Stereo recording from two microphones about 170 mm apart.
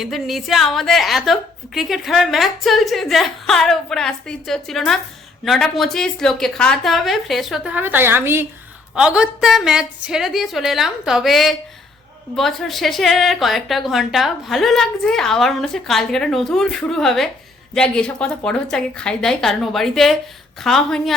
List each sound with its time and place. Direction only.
0.0 s a woman's voice: centre (ahead or behind)